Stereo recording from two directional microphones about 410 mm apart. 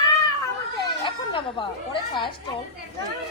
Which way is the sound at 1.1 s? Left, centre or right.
Centre.